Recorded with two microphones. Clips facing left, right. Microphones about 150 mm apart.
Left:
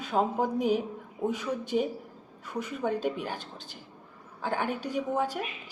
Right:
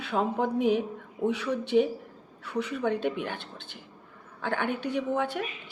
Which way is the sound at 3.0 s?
40° left (ahead or behind).